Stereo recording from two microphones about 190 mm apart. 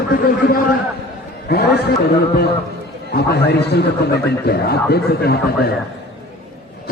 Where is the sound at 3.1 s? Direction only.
60° left (ahead or behind).